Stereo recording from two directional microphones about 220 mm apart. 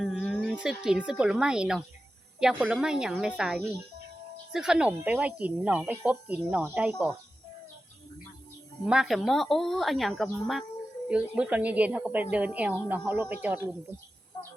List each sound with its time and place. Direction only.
0.0 s speech: centre (ahead or behind)
8.9 s a woman's voice: centre (ahead or behind)